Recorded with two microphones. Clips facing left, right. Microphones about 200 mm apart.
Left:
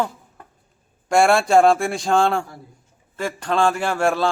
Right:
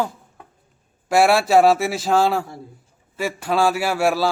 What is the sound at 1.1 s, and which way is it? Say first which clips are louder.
A man's voice: even; 5° right (ahead or behind).